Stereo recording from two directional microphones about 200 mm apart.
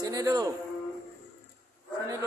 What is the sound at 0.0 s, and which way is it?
Speech, 20° right (ahead or behind).